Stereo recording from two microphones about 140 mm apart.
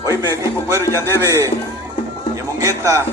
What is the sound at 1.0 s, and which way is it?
Speech, 15° left (ahead or behind).